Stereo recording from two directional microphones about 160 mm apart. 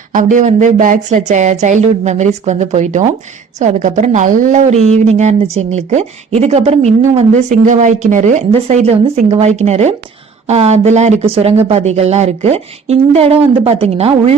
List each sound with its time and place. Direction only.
0.1 s a woman's voice: 50° right (ahead or behind)